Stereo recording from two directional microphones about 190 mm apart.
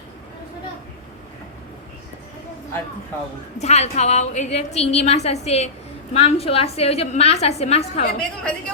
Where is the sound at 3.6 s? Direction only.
35° left (ahead or behind).